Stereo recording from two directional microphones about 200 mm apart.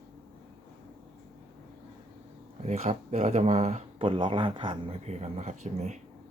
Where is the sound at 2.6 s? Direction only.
35° right (ahead or behind).